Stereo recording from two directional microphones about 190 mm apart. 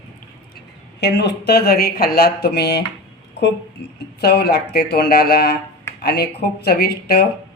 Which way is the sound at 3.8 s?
60° left (ahead or behind).